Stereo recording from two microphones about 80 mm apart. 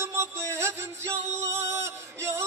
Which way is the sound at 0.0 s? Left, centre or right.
Right.